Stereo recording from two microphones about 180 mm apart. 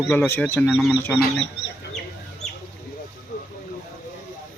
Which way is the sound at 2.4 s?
40° left (ahead or behind).